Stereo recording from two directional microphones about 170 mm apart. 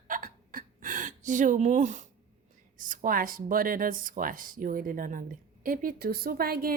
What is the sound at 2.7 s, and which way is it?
Speech, 55° right (ahead or behind).